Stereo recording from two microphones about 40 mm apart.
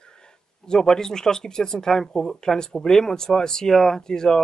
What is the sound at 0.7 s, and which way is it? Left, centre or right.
Speech, centre.